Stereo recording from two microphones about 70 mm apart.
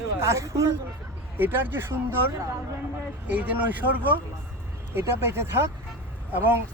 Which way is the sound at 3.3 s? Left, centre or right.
Right.